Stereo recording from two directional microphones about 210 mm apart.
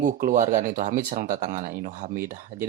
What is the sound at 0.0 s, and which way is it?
Speech, 35° right (ahead or behind).